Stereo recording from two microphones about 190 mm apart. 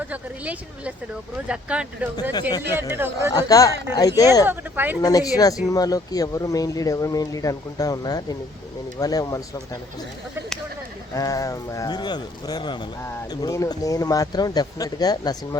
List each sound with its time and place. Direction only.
0.1 s a woman's voice: 5° right (ahead or behind)
3.3 s speech: 20° left (ahead or behind)
4.4 s speech: 10° right (ahead or behind)
5.0 s speech: 20° left (ahead or behind)
11.1 s speech: 20° left (ahead or behind)